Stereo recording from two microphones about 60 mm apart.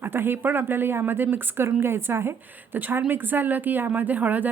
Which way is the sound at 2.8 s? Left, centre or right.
Right.